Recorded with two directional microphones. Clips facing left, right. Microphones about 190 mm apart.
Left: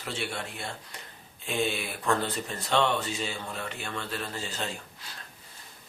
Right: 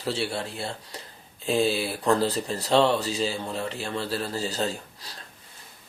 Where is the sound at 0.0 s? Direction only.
35° right (ahead or behind).